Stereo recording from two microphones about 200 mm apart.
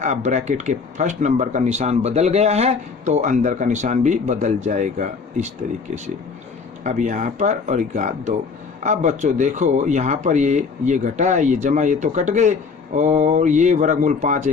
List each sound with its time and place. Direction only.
0.0 s speech: 35° right (ahead or behind)
6.8 s speech: 40° right (ahead or behind)